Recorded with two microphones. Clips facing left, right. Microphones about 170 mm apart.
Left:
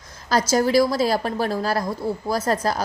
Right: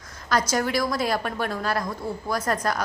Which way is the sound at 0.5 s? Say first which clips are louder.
Left 6 dB; 35° left (ahead or behind).